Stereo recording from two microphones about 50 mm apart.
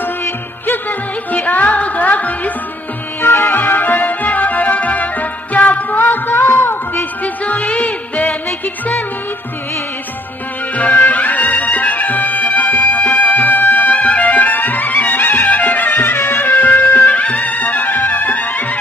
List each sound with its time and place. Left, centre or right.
0.7 s music: left
3.2 s music: left
7.4 s music: left
10.8 s music: left
15.9 s music: left
16.6 s music: left